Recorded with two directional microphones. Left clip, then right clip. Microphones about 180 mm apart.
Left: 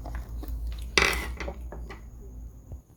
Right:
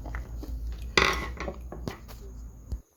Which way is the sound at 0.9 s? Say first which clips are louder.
Even; 35° right (ahead or behind).